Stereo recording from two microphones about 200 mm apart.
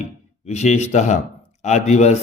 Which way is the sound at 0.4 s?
35° left (ahead or behind).